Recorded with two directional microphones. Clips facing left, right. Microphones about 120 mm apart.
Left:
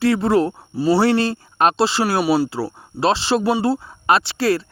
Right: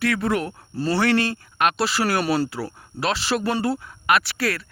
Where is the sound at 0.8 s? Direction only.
10° left (ahead or behind).